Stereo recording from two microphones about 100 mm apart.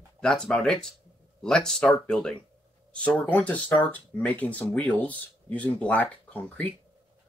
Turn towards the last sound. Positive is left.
turn(degrees=15)  # may be behind; listen again after turning